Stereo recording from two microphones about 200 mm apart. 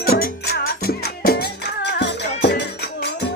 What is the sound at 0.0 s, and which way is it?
Music, 50° left (ahead or behind).